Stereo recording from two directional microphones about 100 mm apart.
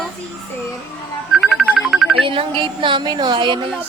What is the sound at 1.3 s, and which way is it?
Music, 5° right (ahead or behind).